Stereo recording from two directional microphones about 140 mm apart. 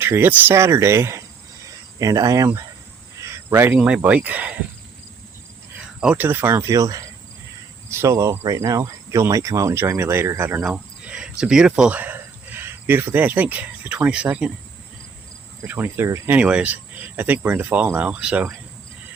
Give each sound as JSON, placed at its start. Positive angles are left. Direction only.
{"t": 0.0, "sound": "speech", "side_deg": -15}
{"t": 3.2, "sound": "cricket", "side_deg": -20}
{"t": 3.8, "sound": "speech", "side_deg": -5}
{"t": 6.0, "sound": "speech", "side_deg": -10}
{"t": 15.6, "sound": "speech", "side_deg": -15}